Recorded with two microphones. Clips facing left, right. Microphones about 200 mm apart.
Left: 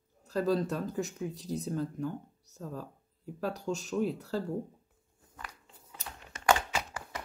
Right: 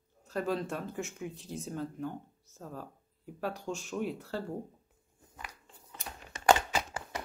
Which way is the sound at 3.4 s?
40° left (ahead or behind).